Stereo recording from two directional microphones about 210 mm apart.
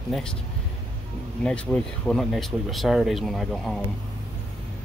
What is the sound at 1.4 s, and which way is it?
Speech, 5° left (ahead or behind).